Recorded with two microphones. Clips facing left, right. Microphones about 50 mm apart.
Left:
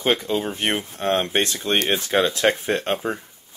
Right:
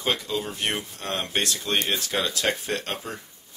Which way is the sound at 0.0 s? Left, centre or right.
Left.